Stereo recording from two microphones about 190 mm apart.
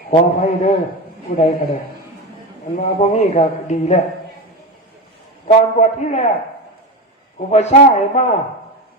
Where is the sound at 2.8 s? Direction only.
35° left (ahead or behind).